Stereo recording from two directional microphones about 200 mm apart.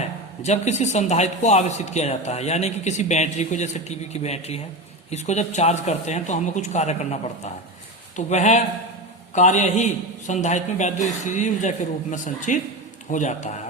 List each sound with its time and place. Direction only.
0.4 s speech: 35° left (ahead or behind)